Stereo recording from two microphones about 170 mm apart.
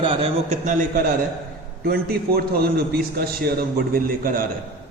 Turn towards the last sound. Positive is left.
turn(degrees=-55)  # may be behind; listen again after turning